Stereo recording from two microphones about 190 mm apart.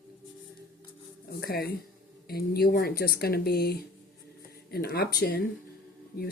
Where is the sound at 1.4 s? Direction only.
55° left (ahead or behind).